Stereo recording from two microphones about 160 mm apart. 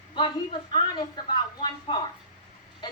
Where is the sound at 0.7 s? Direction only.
30° left (ahead or behind).